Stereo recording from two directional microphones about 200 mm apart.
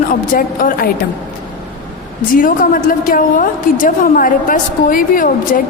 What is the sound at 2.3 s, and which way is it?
A woman's voice, 45° left (ahead or behind).